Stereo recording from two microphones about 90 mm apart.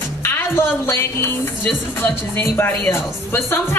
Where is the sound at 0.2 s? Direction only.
25° left (ahead or behind).